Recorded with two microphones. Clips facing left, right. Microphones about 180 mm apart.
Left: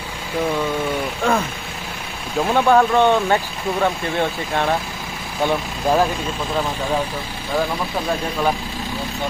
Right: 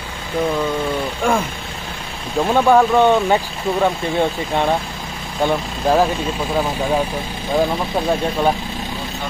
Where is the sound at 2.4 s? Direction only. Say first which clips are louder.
Right 2 dB; 5° right (ahead or behind).